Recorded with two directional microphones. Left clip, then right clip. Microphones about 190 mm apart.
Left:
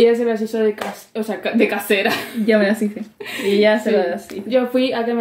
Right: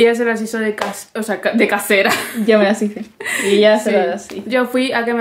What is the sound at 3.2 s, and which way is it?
Speech, 25° right (ahead or behind).